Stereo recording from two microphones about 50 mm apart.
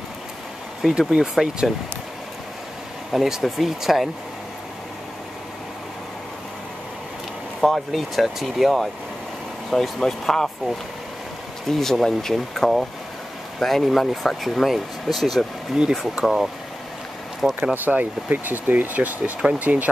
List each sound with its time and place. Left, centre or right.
0.8 s speech: centre
3.1 s speech: centre
7.6 s speech: centre
11.6 s speech: centre
15.8 s speech: centre
17.4 s speech: right
17.8 s speech: right